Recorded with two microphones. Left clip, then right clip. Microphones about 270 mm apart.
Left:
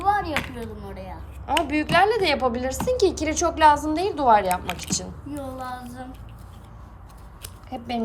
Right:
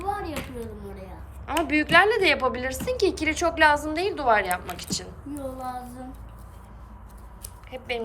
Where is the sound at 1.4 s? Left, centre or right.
Centre.